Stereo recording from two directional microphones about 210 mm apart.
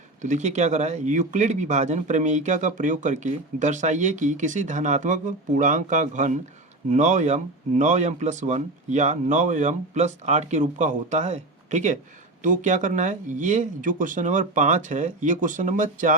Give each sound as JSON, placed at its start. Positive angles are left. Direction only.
{"t": 0.2, "sound": "speech", "side_deg": -35}